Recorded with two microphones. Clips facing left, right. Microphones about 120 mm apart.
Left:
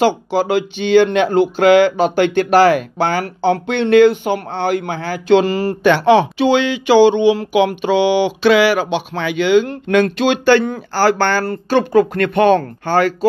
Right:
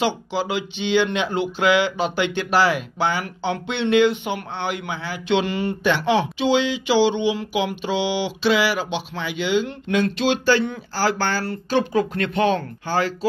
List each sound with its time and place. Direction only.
0.0 s speech: 50° left (ahead or behind)
5.9 s speech: 55° left (ahead or behind)